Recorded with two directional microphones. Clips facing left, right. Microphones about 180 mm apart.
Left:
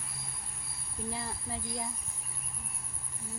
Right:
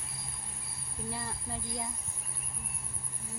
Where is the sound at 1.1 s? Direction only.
15° left (ahead or behind).